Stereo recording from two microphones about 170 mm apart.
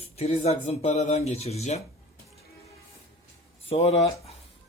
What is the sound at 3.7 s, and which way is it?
Speech, 40° left (ahead or behind).